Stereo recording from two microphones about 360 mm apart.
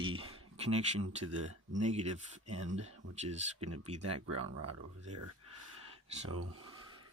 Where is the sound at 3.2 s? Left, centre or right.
Centre.